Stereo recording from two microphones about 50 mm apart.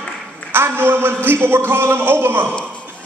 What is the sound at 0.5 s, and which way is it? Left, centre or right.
A man's voice, right.